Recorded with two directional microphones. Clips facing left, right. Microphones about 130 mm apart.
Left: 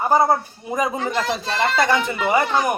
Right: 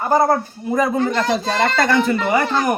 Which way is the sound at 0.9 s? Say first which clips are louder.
Right 5 dB; centre (ahead or behind).